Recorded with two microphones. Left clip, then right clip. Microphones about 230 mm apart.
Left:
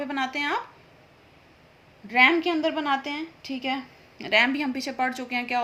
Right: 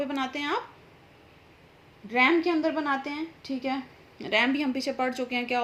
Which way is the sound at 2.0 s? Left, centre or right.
Left.